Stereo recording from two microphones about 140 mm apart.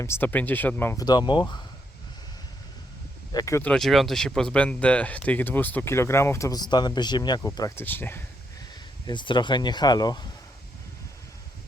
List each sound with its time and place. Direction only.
0.0 s speech: 15° left (ahead or behind)
1.0 s speech: 30° left (ahead or behind)
3.3 s speech: 20° left (ahead or behind)
3.6 s speech: 5° left (ahead or behind); by 7.9 s 25° left (ahead or behind)
7.9 s speech: 15° left (ahead or behind)
9.0 s speech: 35° left (ahead or behind)